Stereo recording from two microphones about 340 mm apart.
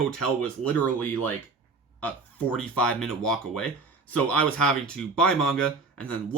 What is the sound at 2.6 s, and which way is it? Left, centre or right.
Speech, centre.